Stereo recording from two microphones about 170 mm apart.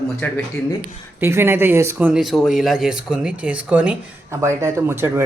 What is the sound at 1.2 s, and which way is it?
Speech, 15° right (ahead or behind).